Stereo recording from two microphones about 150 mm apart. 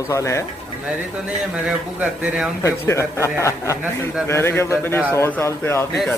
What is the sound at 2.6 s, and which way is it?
A man's voice, 20° left (ahead or behind).